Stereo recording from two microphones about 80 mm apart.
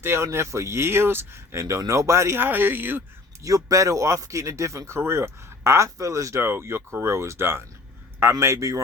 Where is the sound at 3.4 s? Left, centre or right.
Right.